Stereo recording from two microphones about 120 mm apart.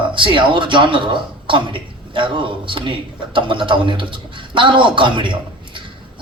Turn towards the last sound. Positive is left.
turn(degrees=-45)  # may be behind; listen again after turning